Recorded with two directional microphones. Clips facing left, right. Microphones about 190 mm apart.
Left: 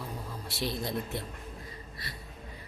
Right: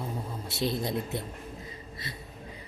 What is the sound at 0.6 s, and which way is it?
Speech, 20° right (ahead or behind).